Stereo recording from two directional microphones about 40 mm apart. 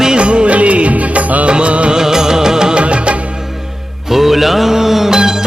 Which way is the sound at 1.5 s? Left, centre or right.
Right.